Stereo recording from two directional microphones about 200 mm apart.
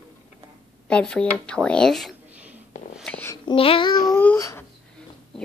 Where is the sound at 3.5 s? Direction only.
25° left (ahead or behind).